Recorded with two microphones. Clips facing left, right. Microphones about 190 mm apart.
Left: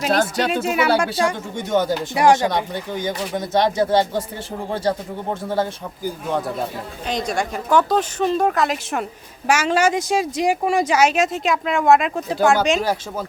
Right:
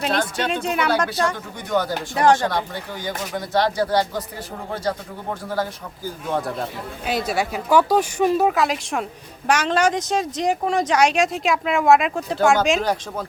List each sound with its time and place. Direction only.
0.1 s speech: 40° left (ahead or behind)
0.4 s speech: 5° left (ahead or behind)
1.5 s speech: 25° left (ahead or behind)
2.1 s speech: 10° left (ahead or behind)
6.2 s speech: centre (ahead or behind)